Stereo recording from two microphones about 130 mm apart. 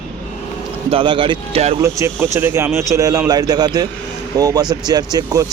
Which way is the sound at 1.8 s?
25° right (ahead or behind).